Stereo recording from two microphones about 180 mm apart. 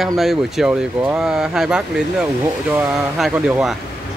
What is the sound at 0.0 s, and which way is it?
Speech, centre (ahead or behind).